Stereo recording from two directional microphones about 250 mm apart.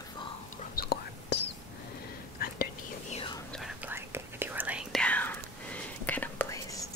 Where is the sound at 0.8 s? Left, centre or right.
Left.